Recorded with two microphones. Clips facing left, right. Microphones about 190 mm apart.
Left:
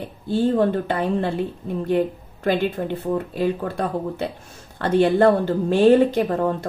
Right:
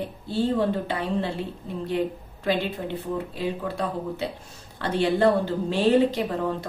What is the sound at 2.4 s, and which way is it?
Speech, 50° left (ahead or behind).